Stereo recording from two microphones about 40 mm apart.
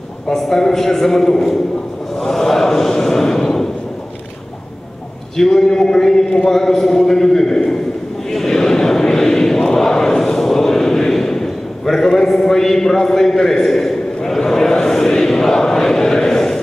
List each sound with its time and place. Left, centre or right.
0.4 s a man's voice: centre
2.2 s a sound: centre
5.4 s a man's voice: centre
8.3 s chant: centre